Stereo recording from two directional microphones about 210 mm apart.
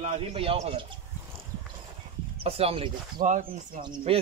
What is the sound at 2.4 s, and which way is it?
A man's voice, 30° right (ahead or behind).